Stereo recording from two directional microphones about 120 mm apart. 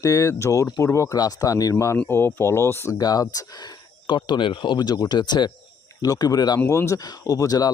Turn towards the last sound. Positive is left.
turn(degrees=30)  # may be behind; listen again after turning